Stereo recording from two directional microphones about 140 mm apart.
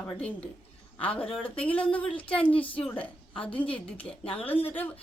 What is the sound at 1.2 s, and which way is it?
A woman's voice, 5° left (ahead or behind).